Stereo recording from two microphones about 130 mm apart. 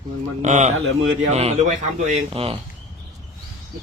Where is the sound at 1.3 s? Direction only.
55° right (ahead or behind).